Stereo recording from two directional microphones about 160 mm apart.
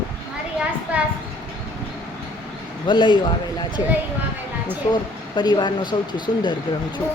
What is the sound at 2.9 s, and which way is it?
Speech, 30° left (ahead or behind).